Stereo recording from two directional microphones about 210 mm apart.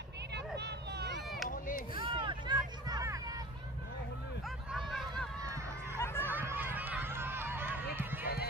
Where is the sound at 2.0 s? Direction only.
20° right (ahead or behind).